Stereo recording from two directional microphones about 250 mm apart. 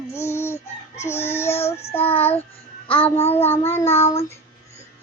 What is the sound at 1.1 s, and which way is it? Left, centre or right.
Child singing, left.